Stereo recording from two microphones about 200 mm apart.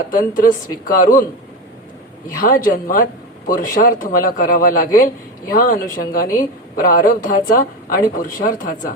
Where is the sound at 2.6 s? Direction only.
45° left (ahead or behind).